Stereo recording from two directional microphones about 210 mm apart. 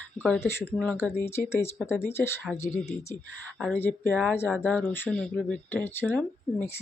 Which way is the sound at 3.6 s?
10° left (ahead or behind).